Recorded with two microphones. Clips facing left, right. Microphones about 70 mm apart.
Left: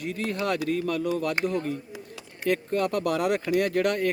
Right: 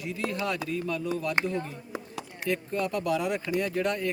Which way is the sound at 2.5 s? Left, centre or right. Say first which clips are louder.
Left 4 dB; left.